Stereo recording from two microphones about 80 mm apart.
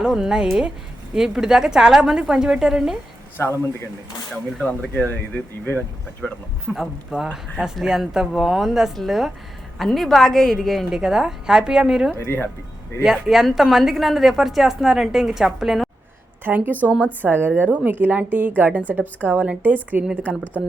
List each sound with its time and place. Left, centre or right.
0.0 s a woman's voice: centre
4.6 s speech: centre
6.2 s a woman's voice: centre
12.1 s speech: left
13.0 s a woman's voice: centre
16.4 s a woman's voice: right